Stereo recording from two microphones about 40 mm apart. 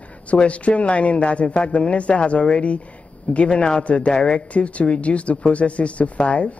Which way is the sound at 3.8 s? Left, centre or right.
Left.